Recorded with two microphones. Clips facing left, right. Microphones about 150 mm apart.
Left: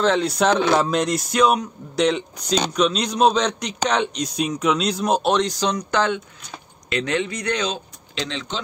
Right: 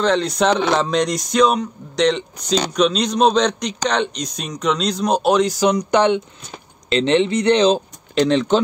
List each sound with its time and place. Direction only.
0.0 s a man's voice: 5° left (ahead or behind); by 7.8 s 30° right (ahead or behind)
8.1 s speech: 50° right (ahead or behind)